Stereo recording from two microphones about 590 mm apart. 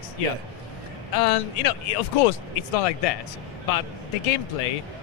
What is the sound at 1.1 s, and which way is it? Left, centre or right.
Speech, left.